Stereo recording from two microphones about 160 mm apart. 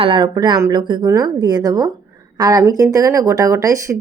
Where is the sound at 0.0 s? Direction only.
30° right (ahead or behind).